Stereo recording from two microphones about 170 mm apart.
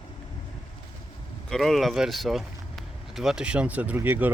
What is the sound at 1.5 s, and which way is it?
Speech, centre (ahead or behind).